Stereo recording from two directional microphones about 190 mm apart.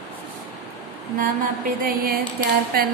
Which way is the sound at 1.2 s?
50° right (ahead or behind).